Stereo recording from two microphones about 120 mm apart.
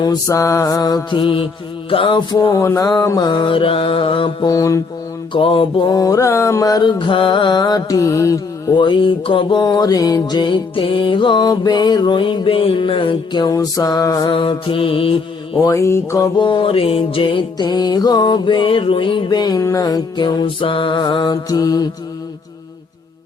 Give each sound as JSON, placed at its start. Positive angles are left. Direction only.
{"t": 0.0, "sound": "music", "side_deg": 30}
{"t": 1.9, "sound": "mantra", "side_deg": 45}
{"t": 2.6, "sound": "mantra", "side_deg": 25}
{"t": 4.4, "sound": "mantra", "side_deg": 30}
{"t": 5.3, "sound": "mantra", "side_deg": 45}
{"t": 5.9, "sound": "mantra", "side_deg": 30}
{"t": 8.8, "sound": "music", "side_deg": 45}
{"t": 14.3, "sound": "mantra", "side_deg": 45}
{"t": 15.6, "sound": "mantra", "side_deg": 25}
{"t": 16.4, "sound": "music", "side_deg": 45}